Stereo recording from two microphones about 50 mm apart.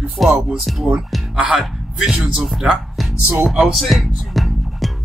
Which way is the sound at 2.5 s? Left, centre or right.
Centre.